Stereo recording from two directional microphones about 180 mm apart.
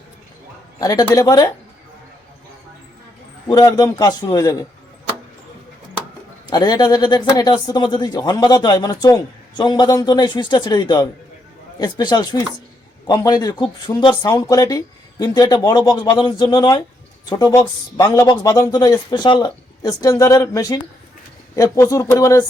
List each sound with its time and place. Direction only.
0.8 s speech: 20° left (ahead or behind)
3.4 s speech: 20° left (ahead or behind)
6.5 s speech: 25° left (ahead or behind)